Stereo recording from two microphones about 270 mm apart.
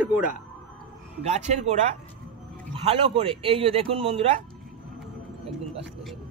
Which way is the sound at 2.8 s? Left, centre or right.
Centre.